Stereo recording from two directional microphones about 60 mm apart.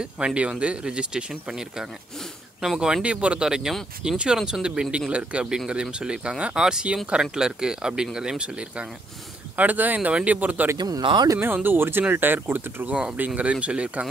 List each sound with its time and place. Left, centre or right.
0.0 s speech: centre
9.6 s speech: right
12.9 s speech: centre